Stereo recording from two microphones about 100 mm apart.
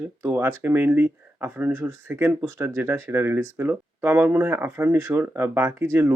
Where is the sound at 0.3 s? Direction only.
20° right (ahead or behind).